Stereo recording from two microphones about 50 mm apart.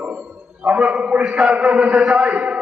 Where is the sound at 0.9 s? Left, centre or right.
Centre.